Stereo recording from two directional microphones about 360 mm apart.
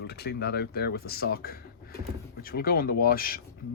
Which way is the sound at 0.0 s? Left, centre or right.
Left.